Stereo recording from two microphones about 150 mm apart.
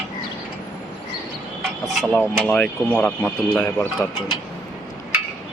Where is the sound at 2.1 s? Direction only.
10° left (ahead or behind).